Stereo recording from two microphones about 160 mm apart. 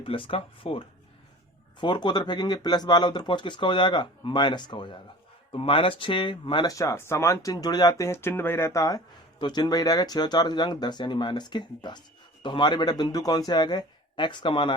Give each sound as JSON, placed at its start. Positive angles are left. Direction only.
{"t": 0.0, "sound": "speech", "side_deg": 35}